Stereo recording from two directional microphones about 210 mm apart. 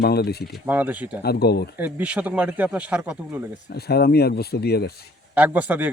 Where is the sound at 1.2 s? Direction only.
50° left (ahead or behind).